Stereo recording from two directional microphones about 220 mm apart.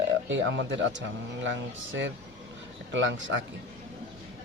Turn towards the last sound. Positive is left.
turn(degrees=-55)  # may be behind; listen again after turning